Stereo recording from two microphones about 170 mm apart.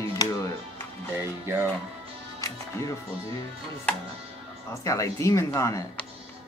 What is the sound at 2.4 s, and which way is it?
Speech, 20° left (ahead or behind).